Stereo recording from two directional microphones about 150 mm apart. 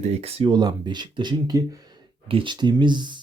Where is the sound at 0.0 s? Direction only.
45° right (ahead or behind).